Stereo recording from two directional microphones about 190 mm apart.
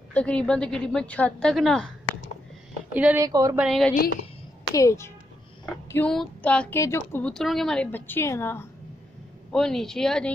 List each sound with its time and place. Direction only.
0.1 s a woman's voice: 5° left (ahead or behind)
2.9 s a woman's voice: 10° right (ahead or behind)
3.5 s a woman's voice: centre (ahead or behind)
4.7 s speech: 15° left (ahead or behind)
5.9 s music: 5° left (ahead or behind)
6.8 s speech: 15° left (ahead or behind)
9.5 s a woman's voice: centre (ahead or behind)